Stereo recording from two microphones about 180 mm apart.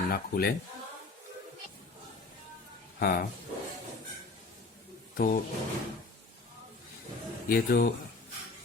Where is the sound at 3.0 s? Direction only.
55° left (ahead or behind).